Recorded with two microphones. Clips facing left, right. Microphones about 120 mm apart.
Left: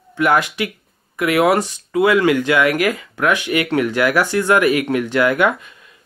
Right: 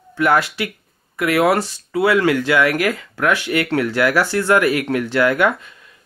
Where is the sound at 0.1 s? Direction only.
15° left (ahead or behind).